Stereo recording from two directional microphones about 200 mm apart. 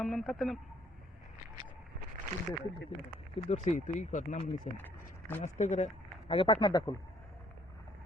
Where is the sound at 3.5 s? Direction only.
35° left (ahead or behind).